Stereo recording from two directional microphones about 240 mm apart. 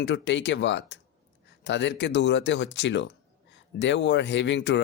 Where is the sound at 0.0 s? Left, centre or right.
Left.